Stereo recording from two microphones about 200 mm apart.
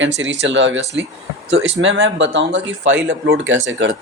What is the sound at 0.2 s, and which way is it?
Speech, 65° right (ahead or behind).